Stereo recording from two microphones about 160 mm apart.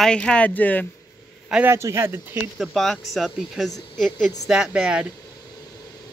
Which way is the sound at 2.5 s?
Centre (ahead or behind).